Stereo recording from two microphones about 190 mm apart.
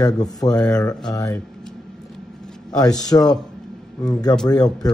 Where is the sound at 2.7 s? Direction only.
20° left (ahead or behind).